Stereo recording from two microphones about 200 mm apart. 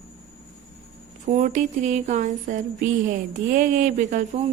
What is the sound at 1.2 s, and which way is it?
A woman's voice, 40° right (ahead or behind).